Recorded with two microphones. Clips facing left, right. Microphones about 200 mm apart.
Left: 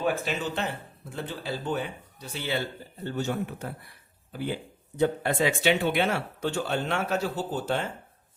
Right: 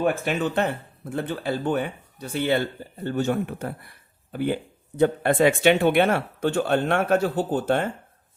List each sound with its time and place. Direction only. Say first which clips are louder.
0.0 s speech: right 5 dB; 55° right (ahead or behind)